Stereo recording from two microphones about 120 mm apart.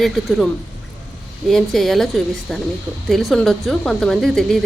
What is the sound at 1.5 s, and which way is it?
Speech, centre (ahead or behind).